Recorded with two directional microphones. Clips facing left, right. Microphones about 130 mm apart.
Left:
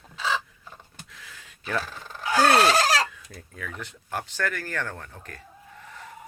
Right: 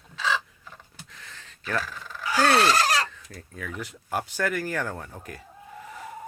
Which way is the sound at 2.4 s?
5° left (ahead or behind).